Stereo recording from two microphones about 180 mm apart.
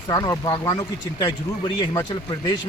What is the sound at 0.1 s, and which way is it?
Speech, 20° left (ahead or behind).